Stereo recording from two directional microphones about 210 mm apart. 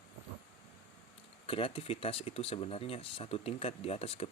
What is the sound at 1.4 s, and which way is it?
Speech, 25° left (ahead or behind).